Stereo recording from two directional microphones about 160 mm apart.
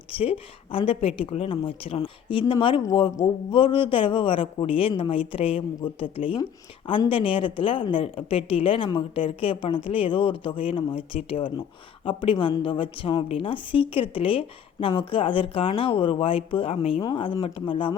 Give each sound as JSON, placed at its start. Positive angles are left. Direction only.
{"t": 0.1, "sound": "a woman's voice", "side_deg": 35}